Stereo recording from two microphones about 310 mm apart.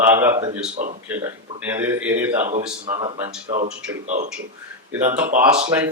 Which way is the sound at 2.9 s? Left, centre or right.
Centre.